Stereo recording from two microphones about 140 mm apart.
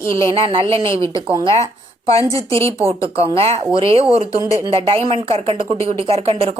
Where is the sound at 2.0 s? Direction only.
45° right (ahead or behind).